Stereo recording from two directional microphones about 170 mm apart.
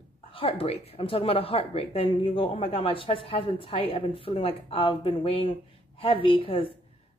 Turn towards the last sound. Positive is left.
turn(degrees=35)  # may be behind; listen again after turning